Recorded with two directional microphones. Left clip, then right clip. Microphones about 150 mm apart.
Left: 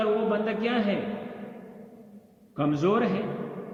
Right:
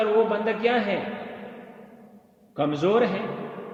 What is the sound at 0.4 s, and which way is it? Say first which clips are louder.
Speech: right 5 dB; 40° right (ahead or behind).